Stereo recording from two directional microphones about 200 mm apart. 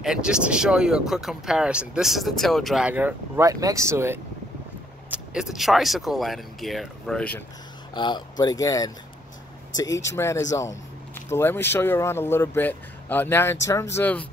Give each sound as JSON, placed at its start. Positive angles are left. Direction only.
{"t": 0.0, "sound": "speech", "side_deg": -5}
{"t": 7.9, "sound": "speech", "side_deg": 20}